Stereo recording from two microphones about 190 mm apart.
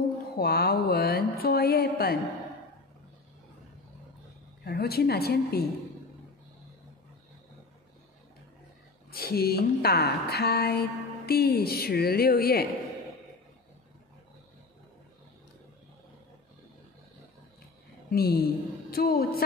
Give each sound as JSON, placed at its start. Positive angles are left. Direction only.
{"t": 0.4, "sound": "a sound", "side_deg": 55}
{"t": 4.6, "sound": "speech", "side_deg": 55}
{"t": 9.1, "sound": "speech", "side_deg": 55}
{"t": 18.1, "sound": "a woman's voice", "side_deg": 55}